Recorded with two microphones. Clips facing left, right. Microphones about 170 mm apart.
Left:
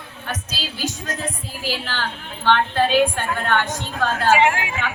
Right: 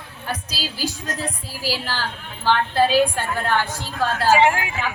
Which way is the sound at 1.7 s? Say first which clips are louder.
Even; 35° right (ahead or behind).